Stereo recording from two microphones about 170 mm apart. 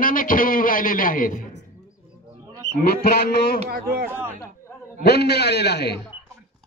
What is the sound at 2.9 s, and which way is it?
Speech, 60° left (ahead or behind).